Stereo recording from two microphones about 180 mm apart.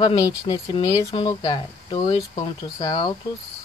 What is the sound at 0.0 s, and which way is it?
Speech, 25° left (ahead or behind).